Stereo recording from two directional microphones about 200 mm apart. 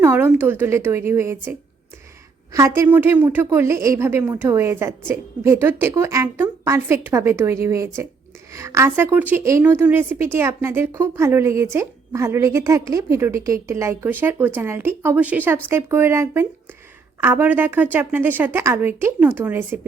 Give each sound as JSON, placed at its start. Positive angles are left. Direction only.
{"t": 0.0, "sound": "a woman's voice", "side_deg": -10}